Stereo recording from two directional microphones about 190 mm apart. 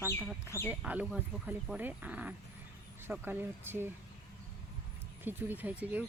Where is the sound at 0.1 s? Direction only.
10° left (ahead or behind).